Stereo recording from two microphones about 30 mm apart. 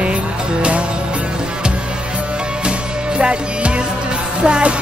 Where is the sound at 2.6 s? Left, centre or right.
Right.